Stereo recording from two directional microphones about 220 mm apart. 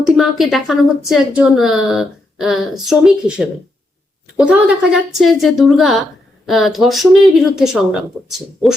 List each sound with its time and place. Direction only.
0.0 s a woman's voice: centre (ahead or behind)